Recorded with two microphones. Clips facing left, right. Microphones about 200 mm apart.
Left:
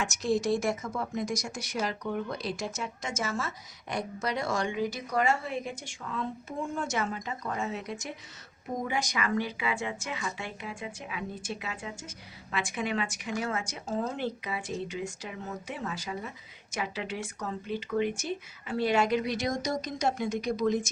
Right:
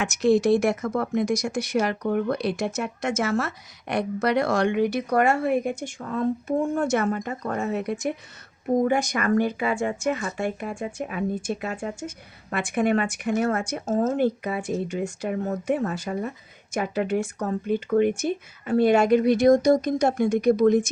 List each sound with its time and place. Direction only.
0.0 s speech: 65° right (ahead or behind)